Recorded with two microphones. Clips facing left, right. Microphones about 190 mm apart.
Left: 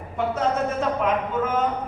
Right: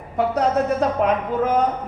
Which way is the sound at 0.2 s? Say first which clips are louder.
Right 4 dB; 40° right (ahead or behind).